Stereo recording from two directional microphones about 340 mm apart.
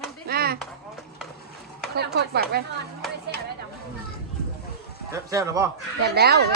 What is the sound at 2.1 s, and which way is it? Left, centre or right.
Speech, right.